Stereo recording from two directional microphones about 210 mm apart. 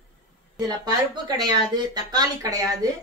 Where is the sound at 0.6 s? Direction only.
20° right (ahead or behind).